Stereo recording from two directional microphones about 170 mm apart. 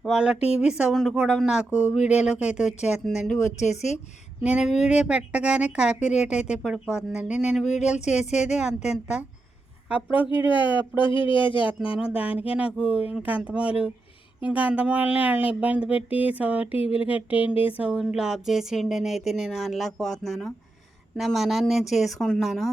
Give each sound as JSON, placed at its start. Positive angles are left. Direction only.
{"t": 0.0, "sound": "speech", "side_deg": -5}
{"t": 3.6, "sound": "speech", "side_deg": 40}
{"t": 4.4, "sound": "speech", "side_deg": -5}
{"t": 11.1, "sound": "speech", "side_deg": 30}
{"t": 11.9, "sound": "speech", "side_deg": -5}
{"t": 16.8, "sound": "speech", "side_deg": 35}
{"t": 17.1, "sound": "speech", "side_deg": -10}